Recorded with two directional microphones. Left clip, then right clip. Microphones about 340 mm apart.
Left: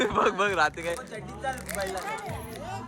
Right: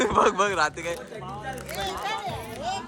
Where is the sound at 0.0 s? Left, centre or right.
Centre.